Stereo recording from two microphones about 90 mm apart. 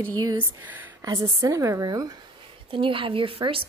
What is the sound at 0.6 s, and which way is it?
Speech, 20° right (ahead or behind).